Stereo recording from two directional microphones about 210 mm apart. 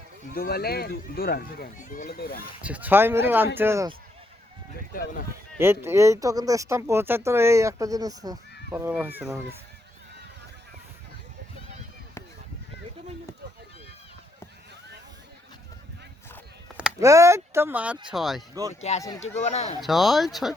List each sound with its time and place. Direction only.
0.3 s speech: 45° left (ahead or behind)
2.6 s speech: 5° right (ahead or behind)
5.5 s speech: 10° right (ahead or behind)
16.7 s speech: 10° right (ahead or behind)
18.7 s speech: 30° left (ahead or behind)
19.8 s speech: centre (ahead or behind)